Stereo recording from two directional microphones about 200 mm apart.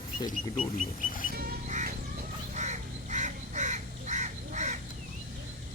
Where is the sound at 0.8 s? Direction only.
45° left (ahead or behind).